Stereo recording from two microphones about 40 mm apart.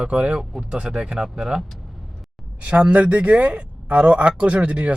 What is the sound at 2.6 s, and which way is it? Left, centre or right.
Speech, right.